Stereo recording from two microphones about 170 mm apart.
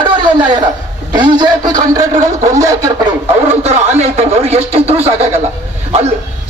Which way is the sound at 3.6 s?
40° right (ahead or behind).